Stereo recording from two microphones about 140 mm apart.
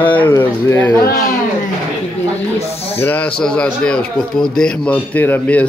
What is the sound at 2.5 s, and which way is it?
Speech, 45° left (ahead or behind).